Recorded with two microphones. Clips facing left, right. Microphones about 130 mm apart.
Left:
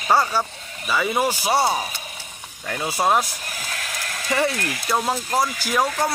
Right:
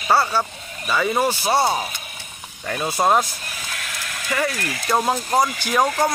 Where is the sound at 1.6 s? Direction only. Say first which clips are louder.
Right 1 dB; 15° right (ahead or behind).